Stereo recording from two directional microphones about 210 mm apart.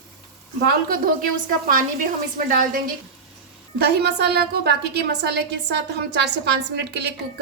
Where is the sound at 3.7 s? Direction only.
50° right (ahead or behind).